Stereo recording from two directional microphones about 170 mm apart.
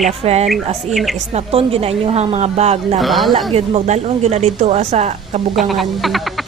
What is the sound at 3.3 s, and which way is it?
Speech, 35° right (ahead or behind).